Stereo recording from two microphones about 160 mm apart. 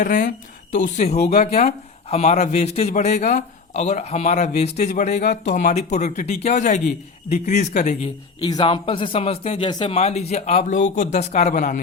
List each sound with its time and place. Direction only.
0.0 s a man's voice: 55° left (ahead or behind)
1.1 s speech: 80° left
1.4 s a man's voice: 40° left (ahead or behind)
8.4 s a man's voice: 25° left (ahead or behind)
9.9 s a man's voice: 40° left (ahead or behind)